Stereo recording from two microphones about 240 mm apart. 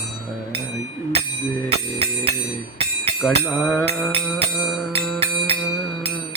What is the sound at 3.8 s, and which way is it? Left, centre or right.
Music, right.